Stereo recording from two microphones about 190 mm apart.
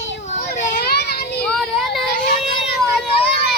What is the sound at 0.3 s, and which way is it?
Children playing, 40° left (ahead or behind).